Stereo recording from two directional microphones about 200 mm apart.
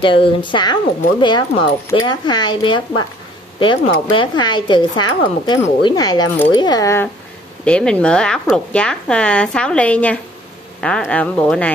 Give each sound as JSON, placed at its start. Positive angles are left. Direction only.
{"t": 0.0, "sound": "speech", "side_deg": 25}
{"t": 7.6, "sound": "speech", "side_deg": 5}